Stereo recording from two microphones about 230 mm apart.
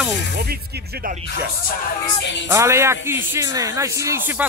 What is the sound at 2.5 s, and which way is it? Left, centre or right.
A man's voice, centre.